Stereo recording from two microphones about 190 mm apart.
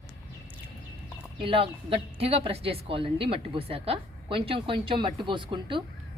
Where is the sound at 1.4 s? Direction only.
30° right (ahead or behind).